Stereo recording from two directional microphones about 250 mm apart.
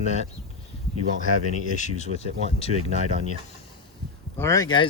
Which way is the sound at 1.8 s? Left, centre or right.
Left.